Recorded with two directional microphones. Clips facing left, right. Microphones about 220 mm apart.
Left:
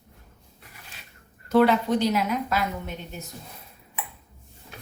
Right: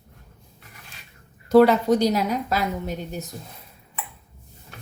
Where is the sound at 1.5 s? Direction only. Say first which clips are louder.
Right 5 dB; 40° right (ahead or behind).